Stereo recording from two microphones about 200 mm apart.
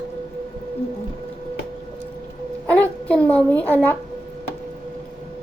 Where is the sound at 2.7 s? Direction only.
5° left (ahead or behind).